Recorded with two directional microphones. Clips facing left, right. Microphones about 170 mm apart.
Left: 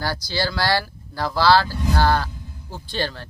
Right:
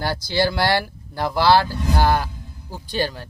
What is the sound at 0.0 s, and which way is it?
Speech, 25° right (ahead or behind).